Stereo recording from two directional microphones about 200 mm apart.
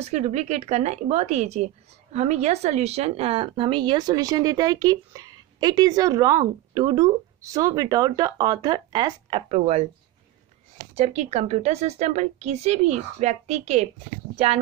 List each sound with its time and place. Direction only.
0.0 s speech: 35° right (ahead or behind)
11.0 s speech: 35° right (ahead or behind)